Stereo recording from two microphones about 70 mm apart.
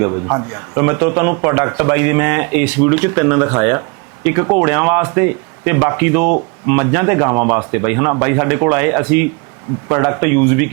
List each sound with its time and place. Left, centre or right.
0.0 s a man's voice: right